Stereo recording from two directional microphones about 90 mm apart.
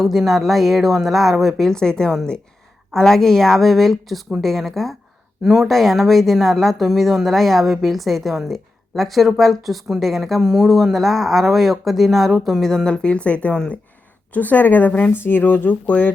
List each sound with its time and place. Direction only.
0.0 s speech: centre (ahead or behind); by 16.1 s 20° left (ahead or behind)